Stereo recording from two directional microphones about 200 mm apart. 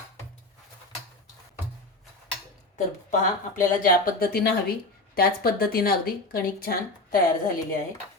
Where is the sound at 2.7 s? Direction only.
40° left (ahead or behind).